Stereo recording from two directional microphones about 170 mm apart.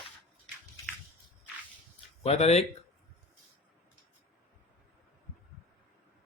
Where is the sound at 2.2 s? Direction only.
40° left (ahead or behind).